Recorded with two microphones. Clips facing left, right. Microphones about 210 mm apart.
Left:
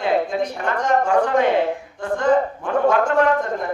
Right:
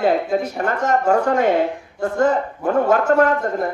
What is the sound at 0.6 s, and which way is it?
A woman's voice, 45° right (ahead or behind).